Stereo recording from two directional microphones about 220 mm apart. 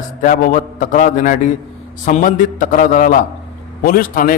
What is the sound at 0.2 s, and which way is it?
A man's voice, 35° left (ahead or behind).